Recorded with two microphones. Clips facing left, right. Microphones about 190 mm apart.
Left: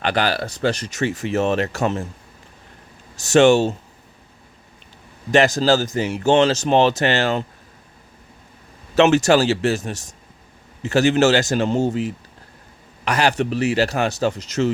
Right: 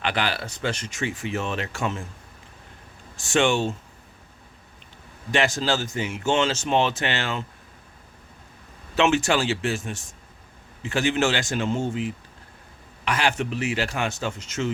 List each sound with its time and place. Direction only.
0.0 s speech: 40° left (ahead or behind)
3.2 s speech: 40° left (ahead or behind)
5.3 s speech: 40° left (ahead or behind)
9.0 s speech: 40° left (ahead or behind)